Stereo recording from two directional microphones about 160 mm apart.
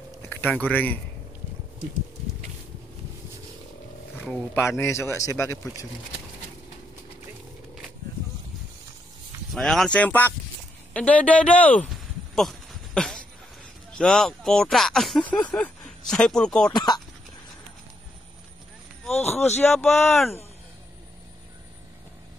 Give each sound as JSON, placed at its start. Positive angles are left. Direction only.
{"t": 0.3, "sound": "speech", "side_deg": 10}
{"t": 4.6, "sound": "a man's voice", "side_deg": 15}
{"t": 9.5, "sound": "a man's voice", "side_deg": 0}
{"t": 10.9, "sound": "a sound", "side_deg": 10}
{"t": 13.9, "sound": "speech", "side_deg": 5}
{"t": 16.7, "sound": "speech", "side_deg": 25}
{"t": 19.0, "sound": "speech", "side_deg": 0}